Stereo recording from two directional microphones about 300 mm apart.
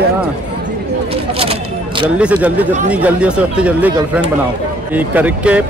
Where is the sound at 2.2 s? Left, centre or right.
Centre.